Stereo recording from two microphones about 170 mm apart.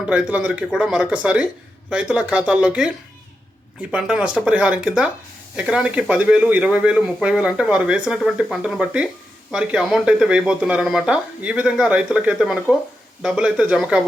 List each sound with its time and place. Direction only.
0.0 s speech: 5° right (ahead or behind)